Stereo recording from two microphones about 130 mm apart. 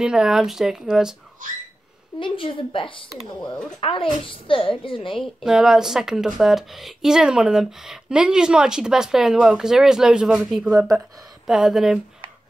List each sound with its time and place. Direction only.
0.0 s speech: 5° right (ahead or behind)
2.1 s a woman's voice: 40° left (ahead or behind)
5.2 s speech: 5° right (ahead or behind)